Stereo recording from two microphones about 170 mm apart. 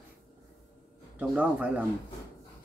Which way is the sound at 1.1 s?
10° right (ahead or behind).